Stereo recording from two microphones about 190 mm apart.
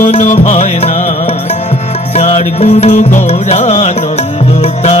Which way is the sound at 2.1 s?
35° left (ahead or behind).